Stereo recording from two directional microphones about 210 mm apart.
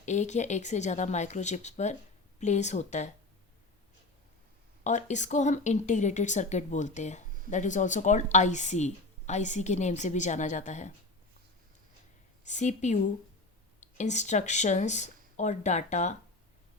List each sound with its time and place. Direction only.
0.0 s speech: 35° left (ahead or behind)
4.8 s speech: 35° left (ahead or behind)
12.5 s speech: 35° left (ahead or behind)
14.0 s speech: 35° left (ahead or behind)